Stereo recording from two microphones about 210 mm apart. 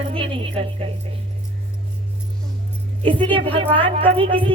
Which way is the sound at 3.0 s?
25° right (ahead or behind).